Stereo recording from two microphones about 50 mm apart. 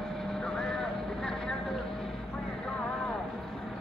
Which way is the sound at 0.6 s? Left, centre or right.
Centre.